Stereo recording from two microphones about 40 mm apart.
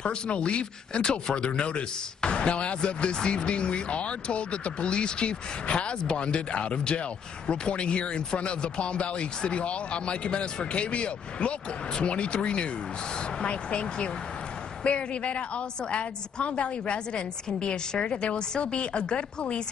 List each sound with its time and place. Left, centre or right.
0.0 s speech: left